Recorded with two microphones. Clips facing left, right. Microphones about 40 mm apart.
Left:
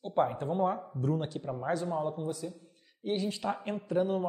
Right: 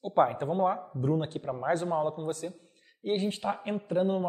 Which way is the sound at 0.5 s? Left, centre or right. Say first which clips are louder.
Right 2 dB; right.